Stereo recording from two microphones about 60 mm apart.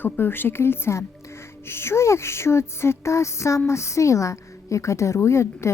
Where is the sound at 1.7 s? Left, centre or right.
Left.